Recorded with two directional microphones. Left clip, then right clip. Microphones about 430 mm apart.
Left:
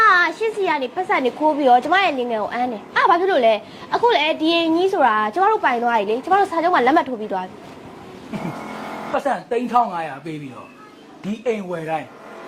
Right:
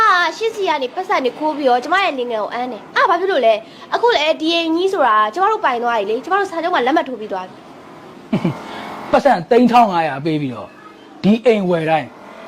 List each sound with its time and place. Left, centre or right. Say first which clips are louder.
0.0 s a woman's voice: right 1 dB; centre
9.1 s a woman's voice: right 9 dB; right
11.4 s a woman's voice: right 8 dB; right